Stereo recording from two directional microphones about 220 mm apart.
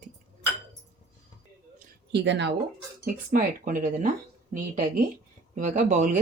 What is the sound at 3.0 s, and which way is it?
Speech, 35° right (ahead or behind).